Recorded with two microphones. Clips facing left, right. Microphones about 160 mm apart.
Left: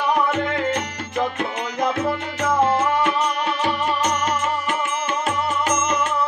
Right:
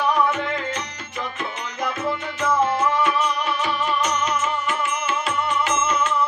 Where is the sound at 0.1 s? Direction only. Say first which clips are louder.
Left 1 dB; 55° left (ahead or behind).